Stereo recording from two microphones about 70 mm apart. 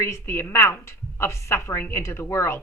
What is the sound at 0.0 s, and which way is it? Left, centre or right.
A woman's voice, left.